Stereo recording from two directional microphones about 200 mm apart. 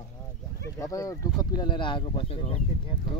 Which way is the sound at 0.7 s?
15° left (ahead or behind).